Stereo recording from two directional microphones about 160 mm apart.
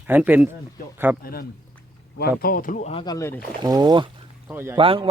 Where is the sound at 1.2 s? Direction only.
70° left (ahead or behind); by 2.9 s 55° left (ahead or behind).